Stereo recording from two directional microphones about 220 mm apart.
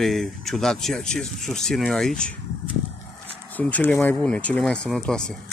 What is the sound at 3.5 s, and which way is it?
A man's voice, 5° left (ahead or behind).